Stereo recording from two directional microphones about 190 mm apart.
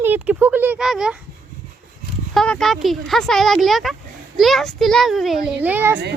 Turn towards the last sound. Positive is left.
turn(degrees=-10)  # may be behind; listen again after turning